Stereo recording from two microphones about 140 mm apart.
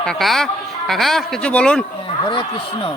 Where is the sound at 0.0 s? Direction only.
5° left (ahead or behind).